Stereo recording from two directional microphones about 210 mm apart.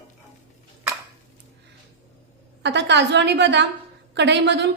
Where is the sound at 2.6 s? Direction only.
55° right (ahead or behind).